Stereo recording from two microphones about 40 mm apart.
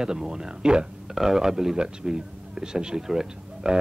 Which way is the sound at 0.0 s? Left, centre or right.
Centre.